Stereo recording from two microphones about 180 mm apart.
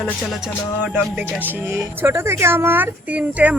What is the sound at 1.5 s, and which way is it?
Speech, 15° right (ahead or behind).